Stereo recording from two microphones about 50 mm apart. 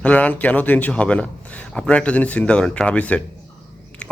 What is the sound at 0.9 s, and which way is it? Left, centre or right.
A man's voice, left.